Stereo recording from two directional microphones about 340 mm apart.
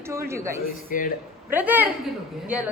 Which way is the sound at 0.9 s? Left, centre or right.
Left.